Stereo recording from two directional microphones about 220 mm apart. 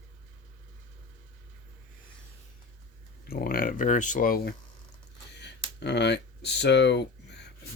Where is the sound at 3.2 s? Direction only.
40° left (ahead or behind).